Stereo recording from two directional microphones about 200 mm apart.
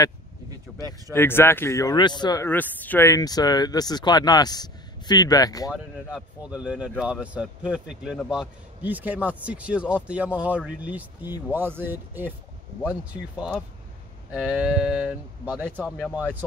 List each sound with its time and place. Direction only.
0.7 s speech: centre (ahead or behind)
1.1 s speech: 10° left (ahead or behind)
5.7 s a man's voice: 5° right (ahead or behind)